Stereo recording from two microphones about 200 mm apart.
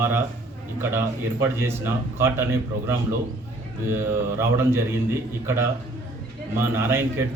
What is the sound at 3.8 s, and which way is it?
Speech, 10° right (ahead or behind).